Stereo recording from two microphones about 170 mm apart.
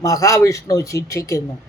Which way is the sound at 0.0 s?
20° left (ahead or behind).